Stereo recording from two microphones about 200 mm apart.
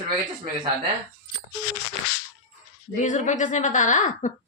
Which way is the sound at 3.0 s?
35° left (ahead or behind).